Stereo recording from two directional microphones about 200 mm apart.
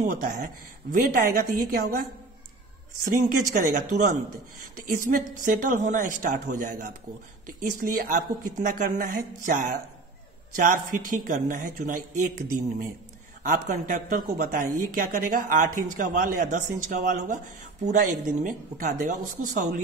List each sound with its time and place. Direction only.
0.0 s a woman's voice: 45° right (ahead or behind)
13.4 s a woman's voice: 40° right (ahead or behind)